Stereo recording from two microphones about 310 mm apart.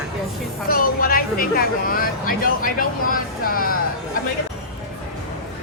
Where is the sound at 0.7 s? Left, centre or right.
Left.